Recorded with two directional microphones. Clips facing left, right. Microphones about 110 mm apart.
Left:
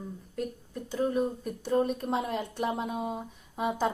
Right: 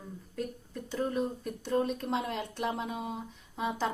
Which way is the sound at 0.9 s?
5° left (ahead or behind).